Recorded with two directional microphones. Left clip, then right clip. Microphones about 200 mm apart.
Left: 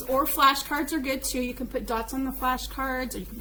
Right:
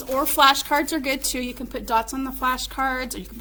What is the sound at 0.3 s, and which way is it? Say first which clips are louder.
A woman's voice: right 7 dB; 30° right (ahead or behind).